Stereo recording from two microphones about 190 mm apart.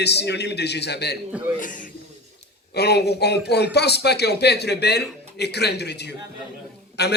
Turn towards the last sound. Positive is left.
turn(degrees=60)  # may be behind; listen again after turning